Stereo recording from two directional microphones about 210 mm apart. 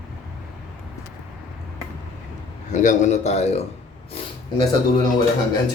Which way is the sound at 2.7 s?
35° left (ahead or behind).